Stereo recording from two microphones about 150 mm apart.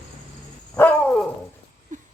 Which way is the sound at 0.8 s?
10° left (ahead or behind).